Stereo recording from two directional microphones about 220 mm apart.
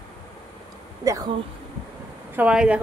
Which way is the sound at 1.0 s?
15° right (ahead or behind).